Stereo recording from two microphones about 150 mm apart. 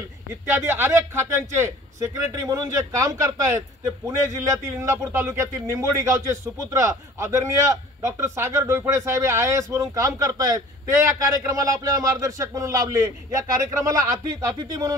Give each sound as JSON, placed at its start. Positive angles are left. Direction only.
{"t": 0.5, "sound": "a man's voice", "side_deg": -15}